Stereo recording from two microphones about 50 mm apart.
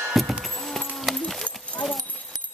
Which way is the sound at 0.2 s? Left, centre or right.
Centre.